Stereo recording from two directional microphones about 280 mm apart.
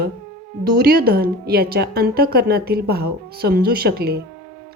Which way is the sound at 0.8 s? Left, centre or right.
Right.